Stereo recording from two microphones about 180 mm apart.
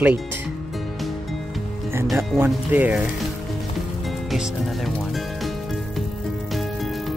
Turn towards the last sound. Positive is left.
turn(degrees=0)  # may be behind; listen again after turning